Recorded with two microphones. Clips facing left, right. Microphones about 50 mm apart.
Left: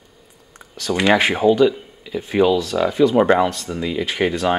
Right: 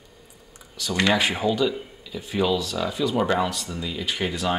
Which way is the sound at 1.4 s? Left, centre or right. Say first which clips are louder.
Left 8 dB; left.